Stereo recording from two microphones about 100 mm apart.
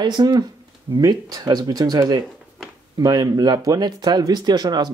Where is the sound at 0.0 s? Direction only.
45° right (ahead or behind).